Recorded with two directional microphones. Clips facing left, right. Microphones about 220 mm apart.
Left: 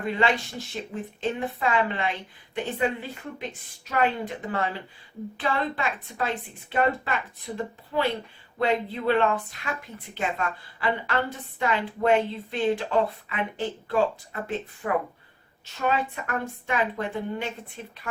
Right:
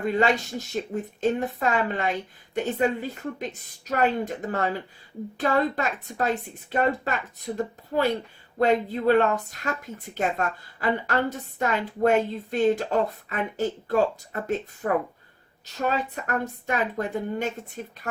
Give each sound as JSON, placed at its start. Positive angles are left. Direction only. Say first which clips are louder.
{"t": 0.0, "sound": "a woman's voice", "louder": "right 3 dB", "side_deg": -45}
{"t": 15.6, "sound": "a woman's voice", "louder": "even", "side_deg": -40}